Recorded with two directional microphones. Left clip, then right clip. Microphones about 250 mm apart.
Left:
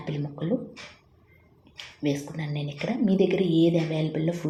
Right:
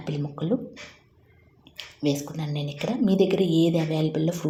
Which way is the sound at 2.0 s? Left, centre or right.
Centre.